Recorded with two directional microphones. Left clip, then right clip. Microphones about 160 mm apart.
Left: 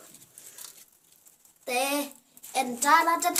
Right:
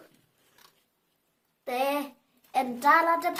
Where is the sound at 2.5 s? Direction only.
35° right (ahead or behind).